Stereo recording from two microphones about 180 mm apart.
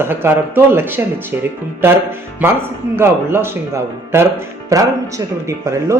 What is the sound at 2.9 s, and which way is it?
Speech, 15° right (ahead or behind).